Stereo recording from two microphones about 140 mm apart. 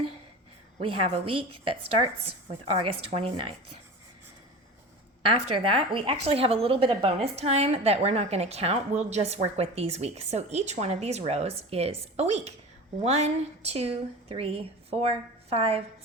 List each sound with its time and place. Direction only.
0.8 s a woman's voice: 40° right (ahead or behind)
5.3 s a woman's voice: 40° right (ahead or behind)